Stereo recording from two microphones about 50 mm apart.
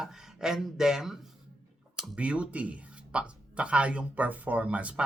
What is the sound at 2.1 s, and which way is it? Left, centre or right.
Speech, right.